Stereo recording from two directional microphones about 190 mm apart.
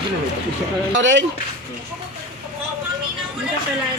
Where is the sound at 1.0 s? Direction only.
75° right (ahead or behind).